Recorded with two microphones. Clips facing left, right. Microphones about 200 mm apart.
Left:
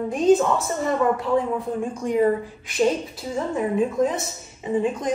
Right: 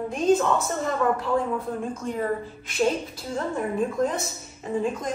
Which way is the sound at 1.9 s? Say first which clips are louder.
Left 8 dB; 15° left (ahead or behind).